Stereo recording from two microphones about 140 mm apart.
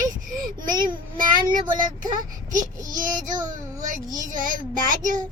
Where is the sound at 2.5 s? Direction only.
70° right (ahead or behind).